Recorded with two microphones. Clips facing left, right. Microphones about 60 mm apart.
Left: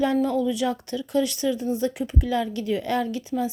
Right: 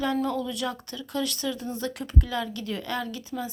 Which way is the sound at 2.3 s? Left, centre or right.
Left.